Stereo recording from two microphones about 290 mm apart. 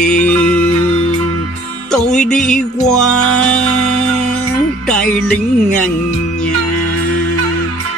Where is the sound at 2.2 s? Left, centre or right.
Centre.